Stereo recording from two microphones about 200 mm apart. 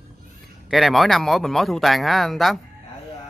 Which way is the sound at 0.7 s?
Centre (ahead or behind).